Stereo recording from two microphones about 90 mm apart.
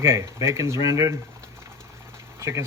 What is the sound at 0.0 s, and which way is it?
Speech, 30° right (ahead or behind).